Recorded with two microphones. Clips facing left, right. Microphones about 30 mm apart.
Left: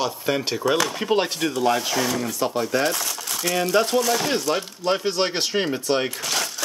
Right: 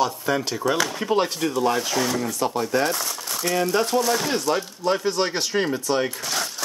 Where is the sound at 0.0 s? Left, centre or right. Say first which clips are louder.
Right 1 dB; centre.